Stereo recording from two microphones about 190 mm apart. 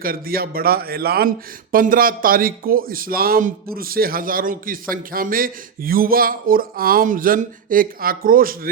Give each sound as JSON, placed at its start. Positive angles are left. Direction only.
{"t": 0.0, "sound": "a man's voice", "side_deg": -50}